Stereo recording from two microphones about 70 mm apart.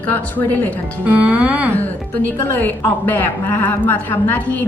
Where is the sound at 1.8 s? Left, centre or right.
Left.